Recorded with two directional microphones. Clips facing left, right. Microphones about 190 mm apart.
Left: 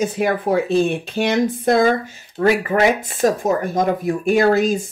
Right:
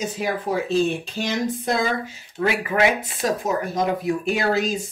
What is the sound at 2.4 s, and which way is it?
Speech, 45° left (ahead or behind).